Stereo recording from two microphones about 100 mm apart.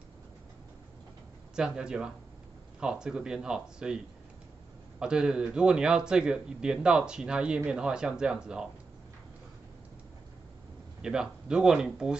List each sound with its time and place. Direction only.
1.5 s a man's voice: 10° right (ahead or behind)
11.0 s a man's voice: 5° right (ahead or behind)